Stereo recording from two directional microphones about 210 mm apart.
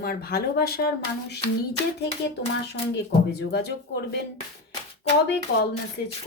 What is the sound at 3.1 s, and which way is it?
Speech, 50° left (ahead or behind).